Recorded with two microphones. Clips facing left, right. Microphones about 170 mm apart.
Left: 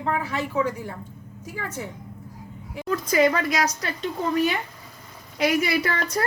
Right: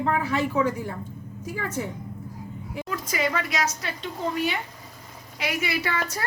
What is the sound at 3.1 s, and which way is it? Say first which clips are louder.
Speech: left 7 dB; 40° left (ahead or behind).